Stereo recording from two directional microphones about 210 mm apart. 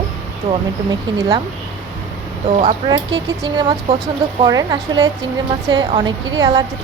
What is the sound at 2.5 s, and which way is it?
A woman's voice, 35° right (ahead or behind).